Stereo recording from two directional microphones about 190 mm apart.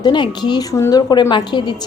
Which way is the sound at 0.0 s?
25° left (ahead or behind).